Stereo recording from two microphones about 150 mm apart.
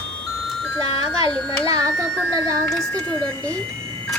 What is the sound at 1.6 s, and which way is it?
Speech, 20° right (ahead or behind).